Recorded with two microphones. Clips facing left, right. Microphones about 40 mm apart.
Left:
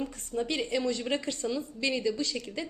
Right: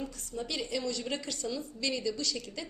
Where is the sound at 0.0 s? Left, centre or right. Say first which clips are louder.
Left 6 dB; left.